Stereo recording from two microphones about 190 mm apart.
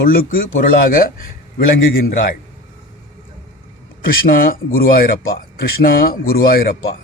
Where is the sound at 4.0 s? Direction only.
50° left (ahead or behind).